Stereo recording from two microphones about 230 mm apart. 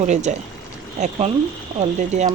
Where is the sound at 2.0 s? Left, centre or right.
Right.